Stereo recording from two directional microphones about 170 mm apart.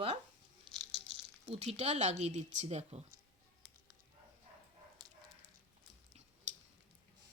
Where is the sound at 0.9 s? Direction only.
30° right (ahead or behind).